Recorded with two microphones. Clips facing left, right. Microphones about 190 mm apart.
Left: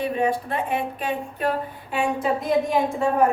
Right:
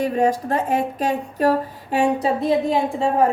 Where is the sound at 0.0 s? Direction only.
45° right (ahead or behind).